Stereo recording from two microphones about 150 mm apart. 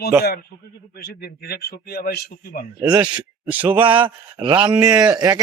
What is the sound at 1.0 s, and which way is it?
A man's voice, 90° left.